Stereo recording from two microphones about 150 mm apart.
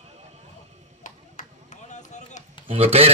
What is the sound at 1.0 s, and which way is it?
Chop, 55° left (ahead or behind).